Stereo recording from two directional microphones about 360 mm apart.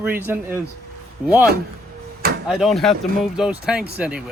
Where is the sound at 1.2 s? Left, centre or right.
Centre.